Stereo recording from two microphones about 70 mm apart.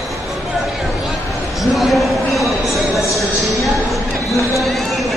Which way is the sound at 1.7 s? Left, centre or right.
Centre.